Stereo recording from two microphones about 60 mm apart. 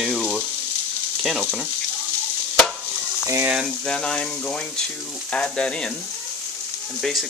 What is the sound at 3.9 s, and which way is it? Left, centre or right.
Speech, centre.